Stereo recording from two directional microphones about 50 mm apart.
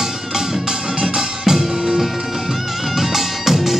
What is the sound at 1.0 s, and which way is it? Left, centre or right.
Music, centre.